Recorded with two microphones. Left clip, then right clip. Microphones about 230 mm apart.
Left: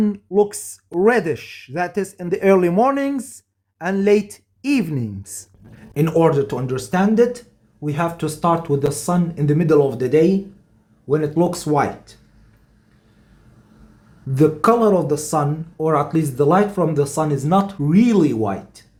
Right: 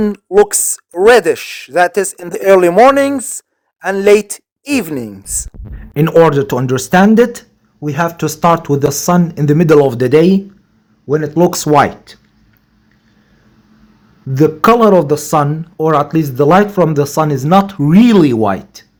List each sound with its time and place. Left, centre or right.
0.0 s speech: right
5.9 s speech: right
7.8 s speech: centre
11.1 s speech: right
14.3 s speech: centre